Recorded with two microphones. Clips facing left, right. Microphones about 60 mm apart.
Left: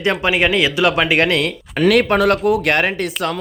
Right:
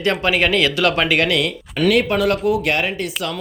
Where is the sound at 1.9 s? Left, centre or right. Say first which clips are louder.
Left 3 dB; left.